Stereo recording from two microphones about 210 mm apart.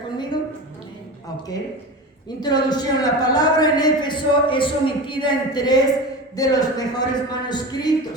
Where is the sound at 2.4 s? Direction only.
20° left (ahead or behind).